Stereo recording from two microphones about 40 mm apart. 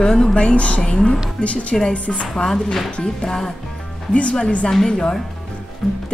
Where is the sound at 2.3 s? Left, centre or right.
Centre.